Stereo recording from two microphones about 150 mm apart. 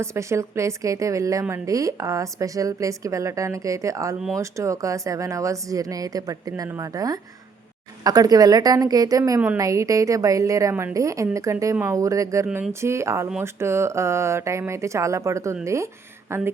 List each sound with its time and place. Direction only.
0.0 s a woman's voice: 20° right (ahead or behind)